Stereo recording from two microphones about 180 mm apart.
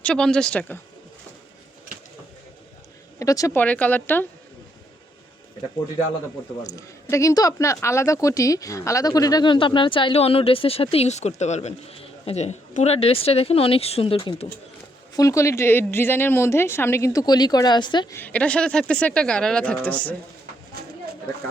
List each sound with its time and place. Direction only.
0.0 s speech: 5° left (ahead or behind)
3.2 s a woman's voice: 20° left (ahead or behind)
6.7 s speech: 15° left (ahead or behind)
15.1 s a woman's voice: 20° left (ahead or behind)
18.2 s speech: 10° left (ahead or behind)